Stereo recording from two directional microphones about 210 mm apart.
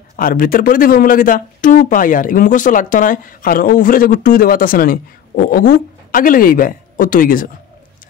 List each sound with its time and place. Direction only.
0.1 s speech: 40° left (ahead or behind)